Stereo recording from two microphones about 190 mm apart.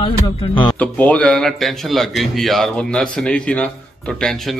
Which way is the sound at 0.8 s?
5° left (ahead or behind).